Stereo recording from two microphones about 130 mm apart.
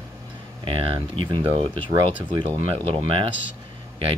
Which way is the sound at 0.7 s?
40° right (ahead or behind).